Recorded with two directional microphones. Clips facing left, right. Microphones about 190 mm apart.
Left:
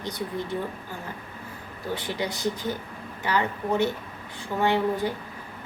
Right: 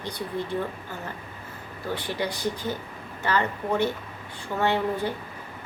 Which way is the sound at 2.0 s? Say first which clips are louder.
Even; 15° left (ahead or behind).